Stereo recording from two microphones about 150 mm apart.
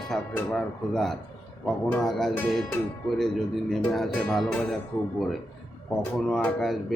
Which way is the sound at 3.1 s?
5° left (ahead or behind).